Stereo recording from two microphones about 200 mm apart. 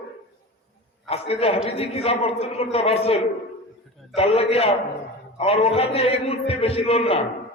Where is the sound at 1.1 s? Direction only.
30° left (ahead or behind).